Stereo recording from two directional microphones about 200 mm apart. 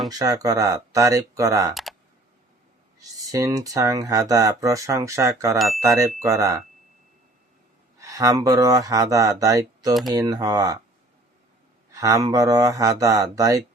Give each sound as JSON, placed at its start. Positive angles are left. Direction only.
{"t": 0.1, "sound": "speech", "side_deg": -20}
{"t": 1.7, "sound": "computer keyboard", "side_deg": 0}
{"t": 3.0, "sound": "speech", "side_deg": -15}
{"t": 5.5, "sound": "speech", "side_deg": 0}
{"t": 5.8, "sound": "speech", "side_deg": -15}
{"t": 7.9, "sound": "speech", "side_deg": -15}
{"t": 11.9, "sound": "speech", "side_deg": -15}